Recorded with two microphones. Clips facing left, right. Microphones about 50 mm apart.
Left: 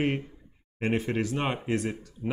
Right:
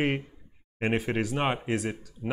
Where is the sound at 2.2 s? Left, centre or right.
Centre.